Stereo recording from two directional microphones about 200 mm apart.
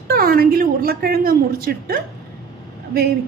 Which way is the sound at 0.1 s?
45° right (ahead or behind).